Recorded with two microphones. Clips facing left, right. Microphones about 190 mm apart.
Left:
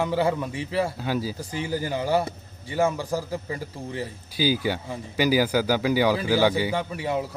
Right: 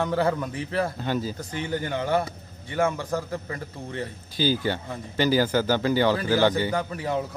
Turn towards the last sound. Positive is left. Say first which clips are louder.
# even
turn(degrees=5)  # may be behind; listen again after turning